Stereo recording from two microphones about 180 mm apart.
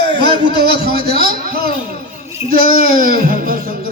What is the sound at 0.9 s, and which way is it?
A man's voice, 55° right (ahead or behind).